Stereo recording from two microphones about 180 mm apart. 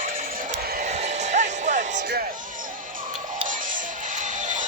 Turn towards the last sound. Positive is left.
turn(degrees=-45)  # may be behind; listen again after turning